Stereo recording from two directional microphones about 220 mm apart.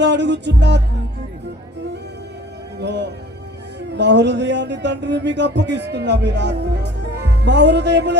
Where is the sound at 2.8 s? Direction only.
50° right (ahead or behind).